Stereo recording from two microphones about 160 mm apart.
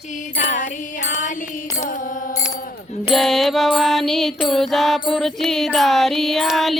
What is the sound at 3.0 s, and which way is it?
Music, centre (ahead or behind).